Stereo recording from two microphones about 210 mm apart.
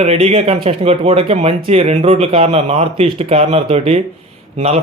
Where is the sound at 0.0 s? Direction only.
30° right (ahead or behind).